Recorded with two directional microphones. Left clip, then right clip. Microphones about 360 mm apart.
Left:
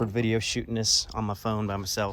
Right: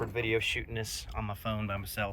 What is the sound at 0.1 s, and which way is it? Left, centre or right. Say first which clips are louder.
Speech: left 2 dB; left.